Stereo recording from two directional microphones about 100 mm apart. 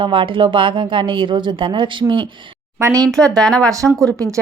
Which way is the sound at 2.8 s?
30° right (ahead or behind).